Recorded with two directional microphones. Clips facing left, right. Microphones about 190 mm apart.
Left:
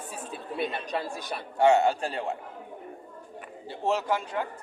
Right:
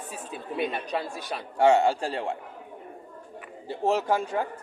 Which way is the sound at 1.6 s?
30° right (ahead or behind).